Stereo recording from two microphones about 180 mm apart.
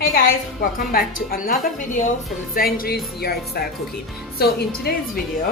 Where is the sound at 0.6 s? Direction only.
55° left (ahead or behind).